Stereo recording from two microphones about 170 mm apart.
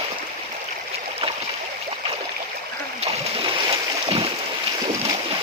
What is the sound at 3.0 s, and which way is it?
Splash, 35° right (ahead or behind).